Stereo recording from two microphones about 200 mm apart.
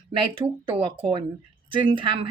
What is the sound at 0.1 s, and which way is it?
A woman's voice, 25° right (ahead or behind).